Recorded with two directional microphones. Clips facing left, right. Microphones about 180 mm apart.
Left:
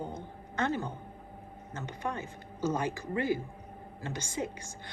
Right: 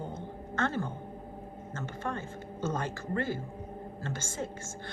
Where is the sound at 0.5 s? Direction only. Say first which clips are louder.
Even; 15° left (ahead or behind).